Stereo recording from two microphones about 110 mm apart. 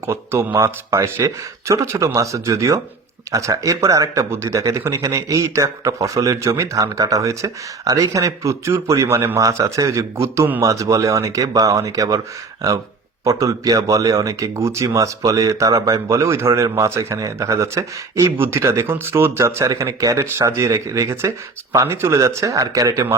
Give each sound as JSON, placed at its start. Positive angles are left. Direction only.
{"t": 0.1, "sound": "speech", "side_deg": -25}
{"t": 13.2, "sound": "speech", "side_deg": -30}